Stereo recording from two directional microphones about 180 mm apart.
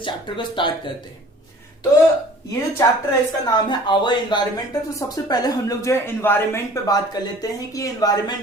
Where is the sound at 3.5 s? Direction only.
25° left (ahead or behind).